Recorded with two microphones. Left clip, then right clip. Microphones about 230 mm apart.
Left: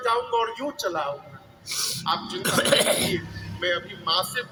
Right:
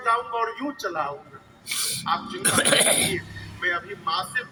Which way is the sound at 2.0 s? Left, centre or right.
Left.